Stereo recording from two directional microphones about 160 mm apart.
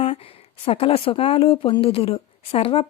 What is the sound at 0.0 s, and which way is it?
A woman's voice, 35° left (ahead or behind).